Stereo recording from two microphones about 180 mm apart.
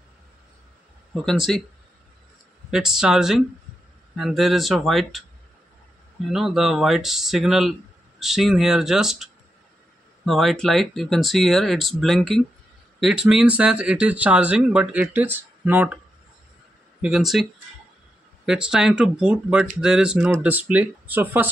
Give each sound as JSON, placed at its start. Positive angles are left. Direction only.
{"t": 1.2, "sound": "speech", "side_deg": 0}
{"t": 2.7, "sound": "speech", "side_deg": -5}
{"t": 6.3, "sound": "speech", "side_deg": 0}
{"t": 17.0, "sound": "speech", "side_deg": 0}